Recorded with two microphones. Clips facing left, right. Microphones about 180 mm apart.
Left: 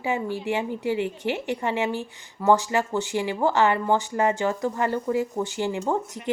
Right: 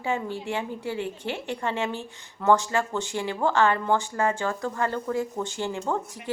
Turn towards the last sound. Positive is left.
turn(degrees=15)  # may be behind; listen again after turning